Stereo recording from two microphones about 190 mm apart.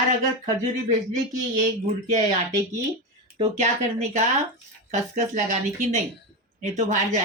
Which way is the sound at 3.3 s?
35° right (ahead or behind).